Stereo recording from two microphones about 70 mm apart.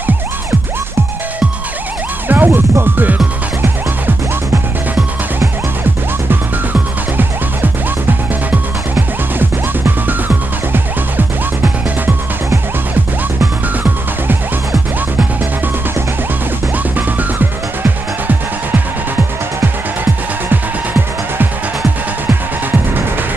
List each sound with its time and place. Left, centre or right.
2.2 s music: right
6.7 s music: right
16.9 s music: right